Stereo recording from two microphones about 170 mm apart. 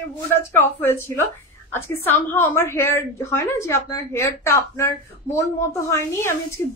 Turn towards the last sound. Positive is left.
turn(degrees=15)  # may be behind; listen again after turning